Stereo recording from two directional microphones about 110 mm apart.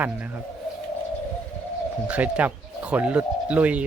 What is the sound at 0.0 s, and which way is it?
Bird, 15° right (ahead or behind).